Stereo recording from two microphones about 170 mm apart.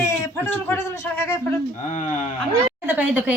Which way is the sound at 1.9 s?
45° left (ahead or behind).